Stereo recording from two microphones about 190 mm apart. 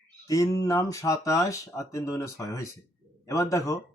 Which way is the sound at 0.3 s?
15° left (ahead or behind).